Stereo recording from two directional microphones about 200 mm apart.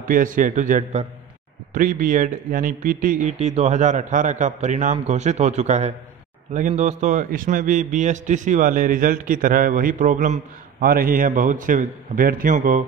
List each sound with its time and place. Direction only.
0.1 s a man's voice: 40° right (ahead or behind)